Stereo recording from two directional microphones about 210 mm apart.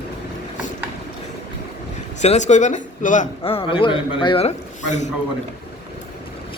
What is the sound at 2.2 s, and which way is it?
A man's voice, 35° left (ahead or behind).